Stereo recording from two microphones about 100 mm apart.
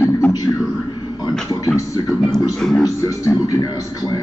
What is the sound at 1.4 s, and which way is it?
Music, 35° left (ahead or behind).